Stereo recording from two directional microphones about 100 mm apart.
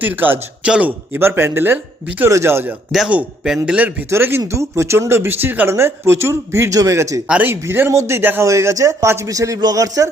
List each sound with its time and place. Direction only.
0.0 s a man's voice: 20° right (ahead or behind); by 10.1 s 35° right (ahead or behind)